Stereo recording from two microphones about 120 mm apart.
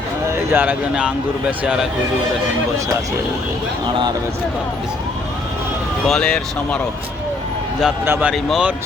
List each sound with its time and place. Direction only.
0.3 s speech: 20° right (ahead or behind)
6.1 s speech: 5° left (ahead or behind)
8.0 s speech: 20° right (ahead or behind)
8.3 s speech: 5° right (ahead or behind)